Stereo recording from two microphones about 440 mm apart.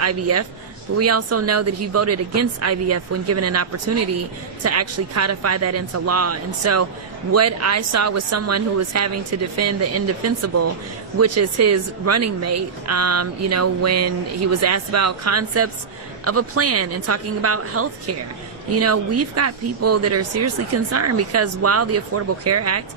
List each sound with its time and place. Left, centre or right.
0.0 s speech: right